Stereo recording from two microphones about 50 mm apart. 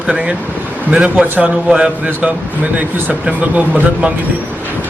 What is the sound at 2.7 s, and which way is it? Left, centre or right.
Speech, right.